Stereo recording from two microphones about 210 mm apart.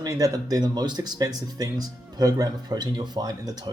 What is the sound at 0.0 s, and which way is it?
Speech, 15° right (ahead or behind).